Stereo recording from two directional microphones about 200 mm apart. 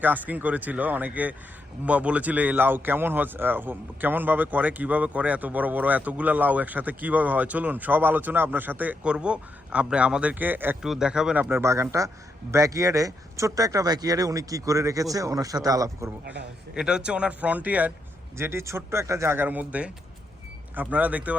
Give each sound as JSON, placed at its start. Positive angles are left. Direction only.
{"t": 0.0, "sound": "speech", "side_deg": -10}
{"t": 16.2, "sound": "a man's voice", "side_deg": -60}
{"t": 16.7, "sound": "speech", "side_deg": -5}